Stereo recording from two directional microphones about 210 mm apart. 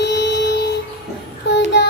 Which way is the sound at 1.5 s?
55° left (ahead or behind).